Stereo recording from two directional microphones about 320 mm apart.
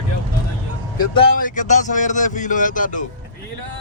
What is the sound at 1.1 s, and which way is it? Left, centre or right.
Speech, left.